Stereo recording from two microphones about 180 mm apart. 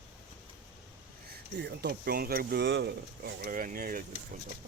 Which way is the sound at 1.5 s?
70° right (ahead or behind).